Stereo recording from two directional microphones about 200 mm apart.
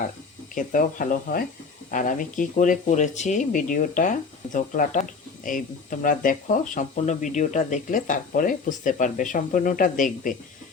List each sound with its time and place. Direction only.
0.5 s speech: 40° left (ahead or behind)